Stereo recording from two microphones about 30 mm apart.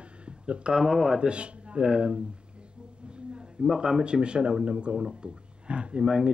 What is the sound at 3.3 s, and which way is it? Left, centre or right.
A man's voice, right.